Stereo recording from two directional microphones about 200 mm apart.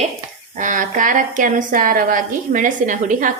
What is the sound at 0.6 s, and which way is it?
A woman's voice, 40° right (ahead or behind).